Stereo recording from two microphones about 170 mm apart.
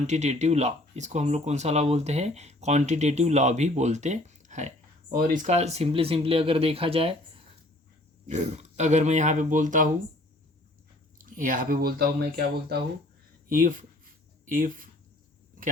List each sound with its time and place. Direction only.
0.1 s speech: 40° right (ahead or behind)
8.3 s speech: 45° right (ahead or behind)
11.2 s speech: 50° right (ahead or behind)
13.5 s speech: 55° right (ahead or behind)